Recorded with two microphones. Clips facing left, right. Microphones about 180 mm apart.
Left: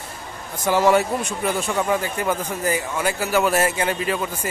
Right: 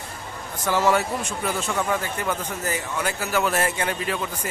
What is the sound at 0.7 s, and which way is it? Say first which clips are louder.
A man's voice: left 4 dB; 15° left (ahead or behind).